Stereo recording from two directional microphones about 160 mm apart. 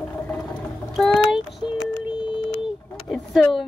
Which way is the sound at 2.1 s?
30° left (ahead or behind).